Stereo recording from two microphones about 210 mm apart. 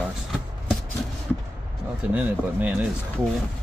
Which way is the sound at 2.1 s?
5° right (ahead or behind).